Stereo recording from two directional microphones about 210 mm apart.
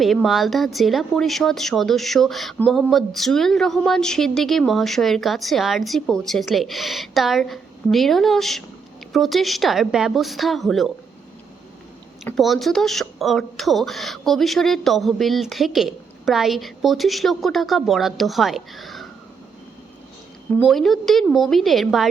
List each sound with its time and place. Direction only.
0.0 s speech: centre (ahead or behind)
12.2 s speech: centre (ahead or behind)
20.6 s speech: centre (ahead or behind)